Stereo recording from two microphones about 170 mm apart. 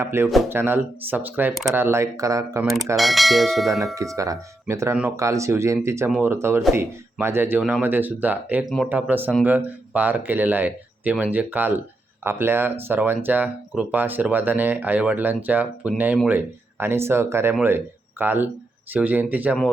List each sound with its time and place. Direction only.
0.0 s speech: 15° right (ahead or behind)
2.9 s speech: centre (ahead or behind)
3.9 s speech: 20° right (ahead or behind)